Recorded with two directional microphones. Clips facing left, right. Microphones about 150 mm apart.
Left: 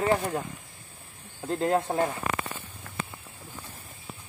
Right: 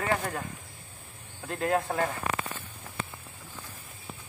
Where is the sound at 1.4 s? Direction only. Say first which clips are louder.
Left 3 dB; 25° left (ahead or behind).